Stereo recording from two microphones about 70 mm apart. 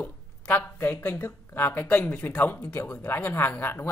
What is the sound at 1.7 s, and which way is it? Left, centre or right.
Speech, left.